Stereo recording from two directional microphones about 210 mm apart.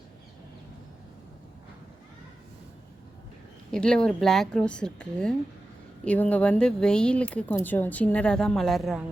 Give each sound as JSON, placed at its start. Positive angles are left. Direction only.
{"t": 3.7, "sound": "speech", "side_deg": 5}